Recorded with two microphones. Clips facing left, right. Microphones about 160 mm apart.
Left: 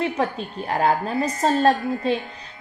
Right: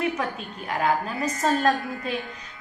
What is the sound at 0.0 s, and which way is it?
A woman's voice, 30° left (ahead or behind).